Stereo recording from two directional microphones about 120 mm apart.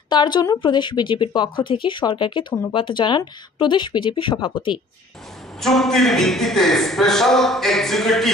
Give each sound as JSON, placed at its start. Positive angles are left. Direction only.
{"t": 0.1, "sound": "a woman's voice", "side_deg": 40}
{"t": 5.6, "sound": "a man's voice", "side_deg": 5}